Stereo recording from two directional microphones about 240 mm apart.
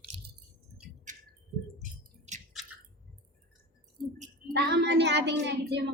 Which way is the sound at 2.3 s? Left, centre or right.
Right.